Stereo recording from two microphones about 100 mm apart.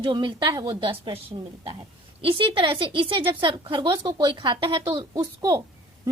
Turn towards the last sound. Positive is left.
turn(degrees=-35)  # may be behind; listen again after turning